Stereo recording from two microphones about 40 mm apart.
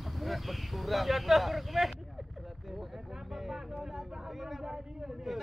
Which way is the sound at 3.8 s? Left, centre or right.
Centre.